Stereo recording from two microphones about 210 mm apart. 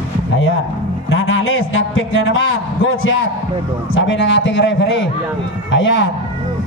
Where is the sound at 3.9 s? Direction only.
60° left (ahead or behind).